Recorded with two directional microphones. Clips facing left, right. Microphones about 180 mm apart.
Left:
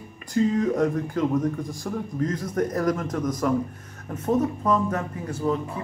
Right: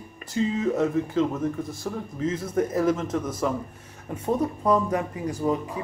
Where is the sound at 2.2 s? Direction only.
5° right (ahead or behind).